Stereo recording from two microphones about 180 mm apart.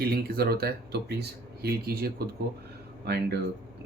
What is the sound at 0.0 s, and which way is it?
Speech, 60° right (ahead or behind).